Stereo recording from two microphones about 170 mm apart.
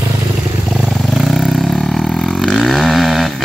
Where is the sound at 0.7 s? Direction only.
Centre (ahead or behind).